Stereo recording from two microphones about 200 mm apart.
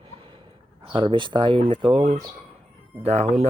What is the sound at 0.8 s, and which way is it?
Speech, 25° right (ahead or behind).